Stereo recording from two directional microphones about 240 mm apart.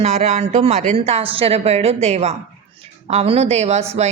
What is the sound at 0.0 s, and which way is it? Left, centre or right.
A woman's voice, right.